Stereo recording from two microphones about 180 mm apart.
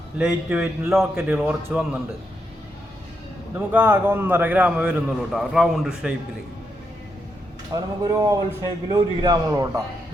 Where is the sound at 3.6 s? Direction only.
10° right (ahead or behind).